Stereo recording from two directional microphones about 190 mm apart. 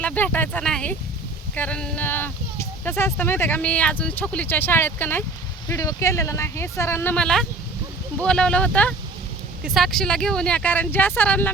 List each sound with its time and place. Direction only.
0.0 s speech: 5° left (ahead or behind)